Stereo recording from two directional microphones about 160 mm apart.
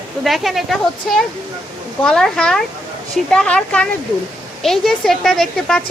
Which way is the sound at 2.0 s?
5° left (ahead or behind).